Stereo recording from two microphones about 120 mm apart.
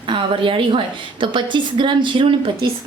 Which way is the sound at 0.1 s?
45° right (ahead or behind).